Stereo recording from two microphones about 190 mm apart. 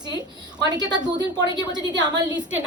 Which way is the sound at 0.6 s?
20° right (ahead or behind).